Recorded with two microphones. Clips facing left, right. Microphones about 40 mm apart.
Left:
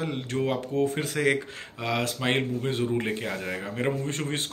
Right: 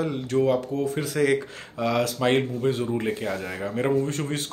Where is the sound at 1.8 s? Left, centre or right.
Left.